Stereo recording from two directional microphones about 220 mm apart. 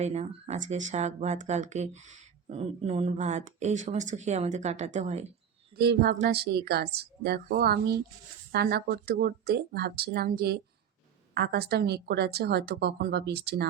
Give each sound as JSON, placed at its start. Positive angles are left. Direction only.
{"t": 0.0, "sound": "speech", "side_deg": -30}
{"t": 5.7, "sound": "a woman's voice", "side_deg": -45}